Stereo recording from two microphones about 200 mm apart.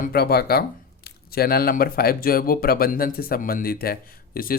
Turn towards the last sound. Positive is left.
turn(degrees=45)  # may be behind; listen again after turning